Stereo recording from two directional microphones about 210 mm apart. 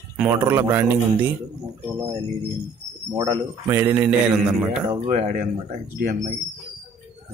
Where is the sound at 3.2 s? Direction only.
15° right (ahead or behind).